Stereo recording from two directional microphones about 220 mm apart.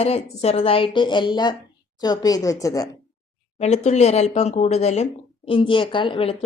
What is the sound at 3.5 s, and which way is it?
Speech, 30° left (ahead or behind).